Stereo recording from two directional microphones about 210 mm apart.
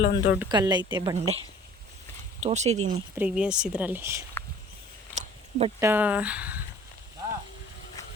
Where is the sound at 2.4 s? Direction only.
35° right (ahead or behind).